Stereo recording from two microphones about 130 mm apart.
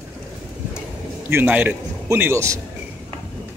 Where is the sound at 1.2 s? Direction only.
15° right (ahead or behind).